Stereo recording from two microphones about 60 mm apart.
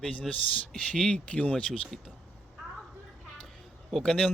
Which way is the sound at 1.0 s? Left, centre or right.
Centre.